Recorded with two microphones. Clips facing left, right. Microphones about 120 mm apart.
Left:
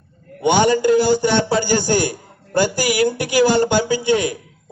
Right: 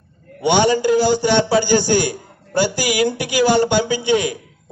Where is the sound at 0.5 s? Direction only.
45° left (ahead or behind).